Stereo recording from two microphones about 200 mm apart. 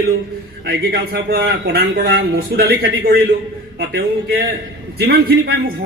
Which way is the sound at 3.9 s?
50° right (ahead or behind).